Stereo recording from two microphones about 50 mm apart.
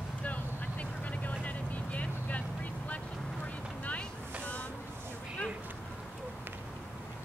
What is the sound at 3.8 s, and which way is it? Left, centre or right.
Boat, left.